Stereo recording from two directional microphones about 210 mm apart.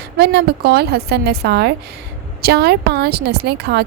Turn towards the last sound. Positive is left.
turn(degrees=-50)  # may be behind; listen again after turning